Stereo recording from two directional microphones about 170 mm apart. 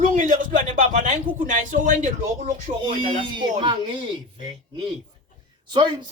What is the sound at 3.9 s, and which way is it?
A man's voice, 30° right (ahead or behind).